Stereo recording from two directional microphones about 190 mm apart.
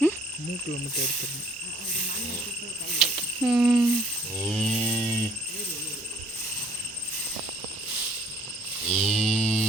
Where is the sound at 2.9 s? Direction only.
5° right (ahead or behind).